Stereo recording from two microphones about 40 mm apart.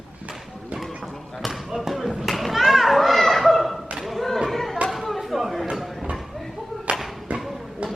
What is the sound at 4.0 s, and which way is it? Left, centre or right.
Chatter, centre.